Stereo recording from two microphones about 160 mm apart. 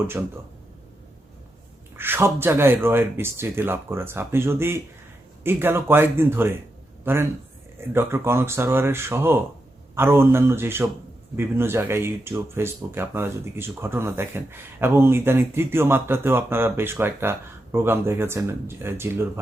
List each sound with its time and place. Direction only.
0.2 s speech: 10° right (ahead or behind)
2.0 s a man's voice: 15° right (ahead or behind)